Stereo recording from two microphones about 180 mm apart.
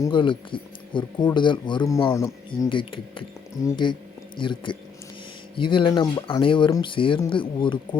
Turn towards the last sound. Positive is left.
turn(degrees=25)  # may be behind; listen again after turning